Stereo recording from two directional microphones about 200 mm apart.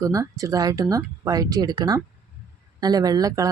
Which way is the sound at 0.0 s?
15° right (ahead or behind).